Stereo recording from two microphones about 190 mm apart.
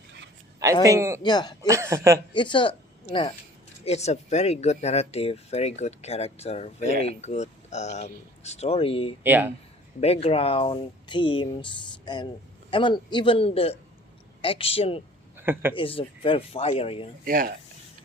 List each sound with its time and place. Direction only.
0.6 s a man's voice: 15° right (ahead or behind)
1.2 s speech: 20° left (ahead or behind)
1.6 s a man's voice: 15° right (ahead or behind)
2.3 s speech: 25° left (ahead or behind)
9.2 s a man's voice: 10° right (ahead or behind)
10.0 s speech: 30° left (ahead or behind)
15.4 s speech: 10° right (ahead or behind)
15.7 s speech: 30° left (ahead or behind)
17.2 s speech: 50° right (ahead or behind)